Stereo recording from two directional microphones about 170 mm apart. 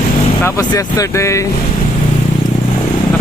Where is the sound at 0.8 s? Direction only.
20° left (ahead or behind).